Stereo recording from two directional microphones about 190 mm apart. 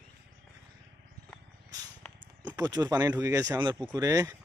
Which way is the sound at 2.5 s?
20° right (ahead or behind).